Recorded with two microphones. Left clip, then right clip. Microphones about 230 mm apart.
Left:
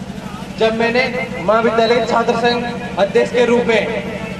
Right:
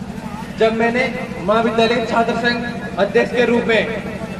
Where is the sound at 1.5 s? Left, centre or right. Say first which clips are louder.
Left 2 dB; left.